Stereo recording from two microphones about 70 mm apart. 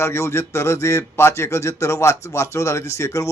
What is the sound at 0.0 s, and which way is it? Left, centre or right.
Speech, left.